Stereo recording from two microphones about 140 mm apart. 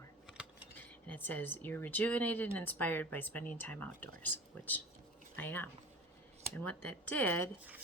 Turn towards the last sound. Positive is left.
turn(degrees=15)  # may be behind; listen again after turning